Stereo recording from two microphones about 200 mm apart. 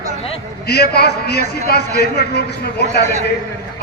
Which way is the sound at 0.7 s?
55° left (ahead or behind).